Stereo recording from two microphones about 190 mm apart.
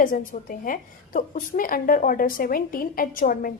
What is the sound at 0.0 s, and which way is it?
A woman's voice, 45° left (ahead or behind).